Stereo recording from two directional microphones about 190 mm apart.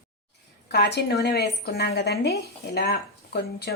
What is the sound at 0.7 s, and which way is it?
A woman's voice, 60° left (ahead or behind).